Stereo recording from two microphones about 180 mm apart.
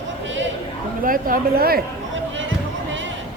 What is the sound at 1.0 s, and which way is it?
Speech, 50° right (ahead or behind).